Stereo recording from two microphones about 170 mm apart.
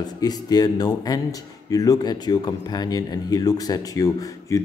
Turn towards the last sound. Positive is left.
turn(degrees=20)  # may be behind; listen again after turning